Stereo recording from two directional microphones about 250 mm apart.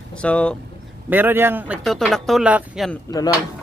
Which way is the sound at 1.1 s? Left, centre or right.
Centre.